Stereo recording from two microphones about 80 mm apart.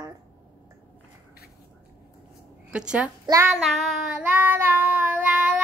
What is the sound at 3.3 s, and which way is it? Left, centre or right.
Child singing, right.